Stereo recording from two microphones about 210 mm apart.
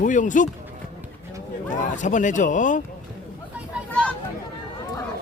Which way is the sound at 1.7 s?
35° left (ahead or behind).